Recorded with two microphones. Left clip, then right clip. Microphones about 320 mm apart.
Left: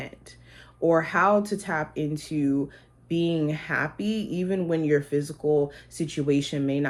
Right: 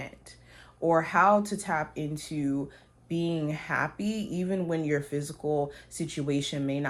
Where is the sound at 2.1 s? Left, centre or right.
Centre.